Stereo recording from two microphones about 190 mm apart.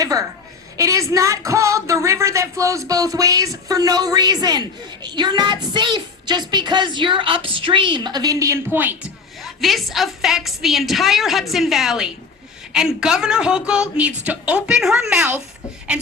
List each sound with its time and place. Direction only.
0.8 s speech: 15° right (ahead or behind)
9.4 s a woman's voice: centre (ahead or behind)